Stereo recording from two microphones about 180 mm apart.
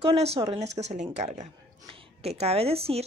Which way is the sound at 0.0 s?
35° right (ahead or behind).